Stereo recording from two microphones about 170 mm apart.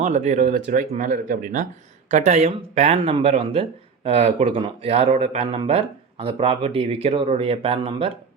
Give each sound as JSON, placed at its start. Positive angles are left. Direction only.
{"t": 0.0, "sound": "speech", "side_deg": -45}